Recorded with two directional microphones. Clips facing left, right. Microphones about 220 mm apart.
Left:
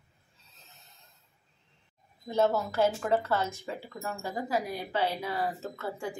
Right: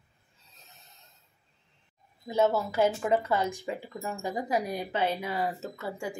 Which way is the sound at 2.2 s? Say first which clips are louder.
Right 1 dB; 10° right (ahead or behind).